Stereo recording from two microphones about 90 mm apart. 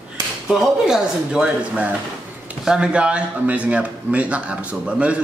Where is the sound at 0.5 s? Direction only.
5° right (ahead or behind).